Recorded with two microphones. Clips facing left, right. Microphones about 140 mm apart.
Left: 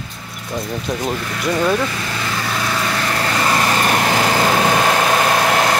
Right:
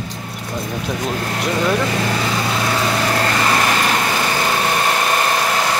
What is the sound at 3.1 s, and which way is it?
Vehicle, 5° right (ahead or behind).